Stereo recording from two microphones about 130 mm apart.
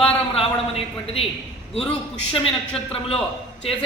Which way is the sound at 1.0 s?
50° left (ahead or behind).